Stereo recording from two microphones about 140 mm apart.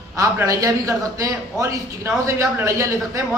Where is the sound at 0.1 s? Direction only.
20° right (ahead or behind).